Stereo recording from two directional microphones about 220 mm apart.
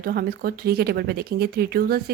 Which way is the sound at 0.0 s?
45° right (ahead or behind).